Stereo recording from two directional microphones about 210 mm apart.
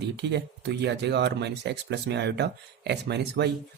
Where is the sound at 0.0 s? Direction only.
55° right (ahead or behind).